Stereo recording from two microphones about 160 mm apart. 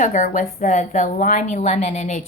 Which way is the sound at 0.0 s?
50° left (ahead or behind).